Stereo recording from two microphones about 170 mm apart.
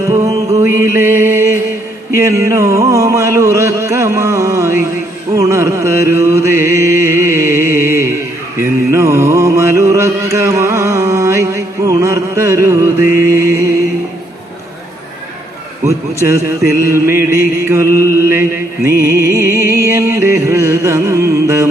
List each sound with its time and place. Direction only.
0.1 s music: 20° right (ahead or behind)
2.1 s a sound: 15° right (ahead or behind)
5.3 s mantra: 15° right (ahead or behind)
13.3 s music: 15° right (ahead or behind)
16.3 s a sound: 15° right (ahead or behind)
18.9 s music: 15° right (ahead or behind)